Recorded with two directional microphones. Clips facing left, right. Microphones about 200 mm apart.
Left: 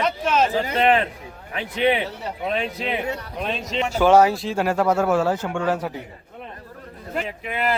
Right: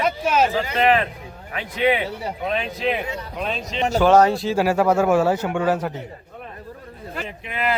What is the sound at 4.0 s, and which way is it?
Speech, 10° left (ahead or behind).